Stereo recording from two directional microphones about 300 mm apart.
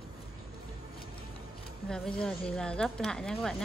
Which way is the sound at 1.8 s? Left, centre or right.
Centre.